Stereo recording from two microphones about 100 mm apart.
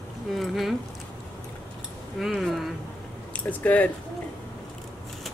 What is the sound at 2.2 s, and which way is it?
Speech, centre (ahead or behind).